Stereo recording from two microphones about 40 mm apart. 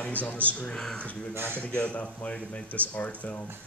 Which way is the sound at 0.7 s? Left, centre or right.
Centre.